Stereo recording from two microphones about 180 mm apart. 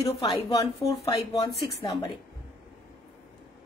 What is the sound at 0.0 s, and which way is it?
Speech, 30° left (ahead or behind).